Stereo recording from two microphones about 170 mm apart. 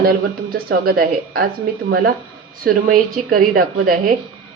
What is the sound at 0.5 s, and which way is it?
A woman's voice, 60° right (ahead or behind).